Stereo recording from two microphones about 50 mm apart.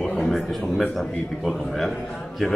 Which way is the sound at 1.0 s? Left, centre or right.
Centre.